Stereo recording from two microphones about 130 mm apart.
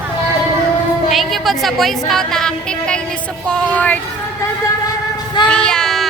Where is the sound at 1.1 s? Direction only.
Centre (ahead or behind).